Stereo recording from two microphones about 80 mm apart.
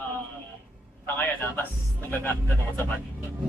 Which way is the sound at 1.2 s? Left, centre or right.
Left.